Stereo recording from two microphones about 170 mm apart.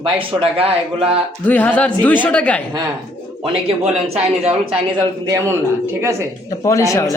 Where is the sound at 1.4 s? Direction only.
10° left (ahead or behind).